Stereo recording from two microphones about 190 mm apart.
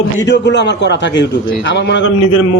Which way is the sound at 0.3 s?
65° left (ahead or behind).